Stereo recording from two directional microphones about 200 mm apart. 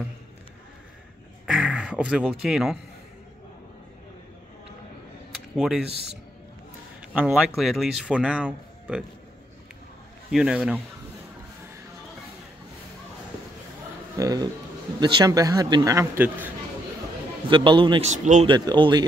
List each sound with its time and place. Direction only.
1.4 s speech: 5° right (ahead or behind)
5.6 s speech: 5° right (ahead or behind)
7.2 s speech: 5° right (ahead or behind)
10.3 s speech: 5° right (ahead or behind)
14.1 s speech: 15° right (ahead or behind)
17.5 s a man's voice: 25° right (ahead or behind)
18.1 s speech: 35° right (ahead or behind)
18.5 s a man's voice: 25° right (ahead or behind)